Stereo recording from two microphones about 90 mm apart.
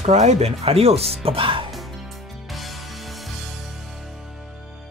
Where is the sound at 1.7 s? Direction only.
Centre (ahead or behind).